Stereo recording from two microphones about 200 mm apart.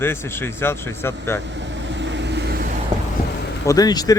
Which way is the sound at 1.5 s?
60° right (ahead or behind).